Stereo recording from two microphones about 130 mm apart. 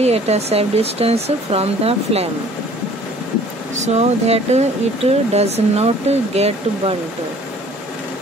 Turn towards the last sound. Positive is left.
turn(degrees=-55)  # may be behind; listen again after turning